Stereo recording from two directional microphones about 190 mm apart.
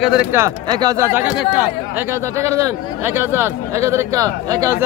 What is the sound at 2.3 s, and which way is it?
Speech, 15° right (ahead or behind).